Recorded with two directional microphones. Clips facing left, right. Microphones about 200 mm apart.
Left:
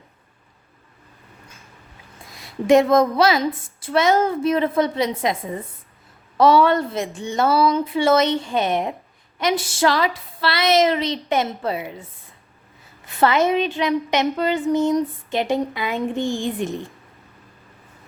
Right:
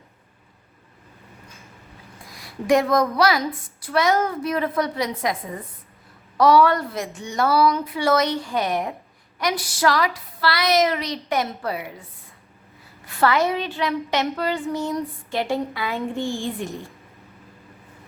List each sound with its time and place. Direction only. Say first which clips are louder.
2.2 s a woman's voice: left 4 dB; 25° left (ahead or behind)
13.1 s a woman's voice: left 2 dB; 20° left (ahead or behind)